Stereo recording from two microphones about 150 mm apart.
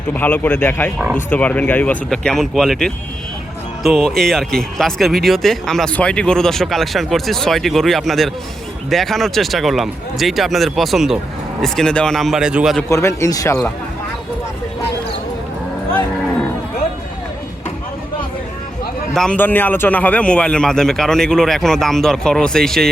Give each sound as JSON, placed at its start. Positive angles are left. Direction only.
{"t": 0.1, "sound": "speech", "side_deg": 10}
{"t": 12.9, "sound": "speech", "side_deg": 20}
{"t": 19.1, "sound": "speech", "side_deg": 5}